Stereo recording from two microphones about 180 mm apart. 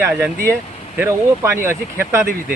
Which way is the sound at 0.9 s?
15° right (ahead or behind).